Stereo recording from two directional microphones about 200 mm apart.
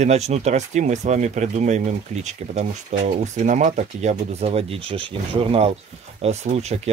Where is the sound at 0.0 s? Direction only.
35° right (ahead or behind).